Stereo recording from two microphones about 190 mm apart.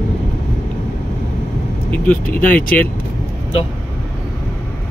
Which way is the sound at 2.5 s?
45° left (ahead or behind).